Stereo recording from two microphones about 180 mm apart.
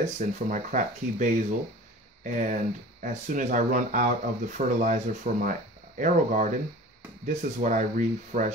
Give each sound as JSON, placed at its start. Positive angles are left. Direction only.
{"t": 0.0, "sound": "speech", "side_deg": -40}